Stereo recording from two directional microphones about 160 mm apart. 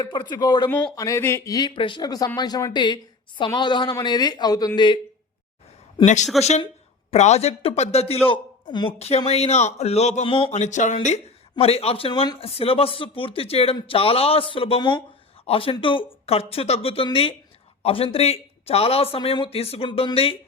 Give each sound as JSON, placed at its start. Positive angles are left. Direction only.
{"t": 0.0, "sound": "speech", "side_deg": 30}
{"t": 6.3, "sound": "speech", "side_deg": 0}
{"t": 7.1, "sound": "speech", "side_deg": 45}
{"t": 8.3, "sound": "speech", "side_deg": 30}
{"t": 10.2, "sound": "speech", "side_deg": 35}
{"t": 10.5, "sound": "speech", "side_deg": 50}
{"t": 11.5, "sound": "speech", "side_deg": 40}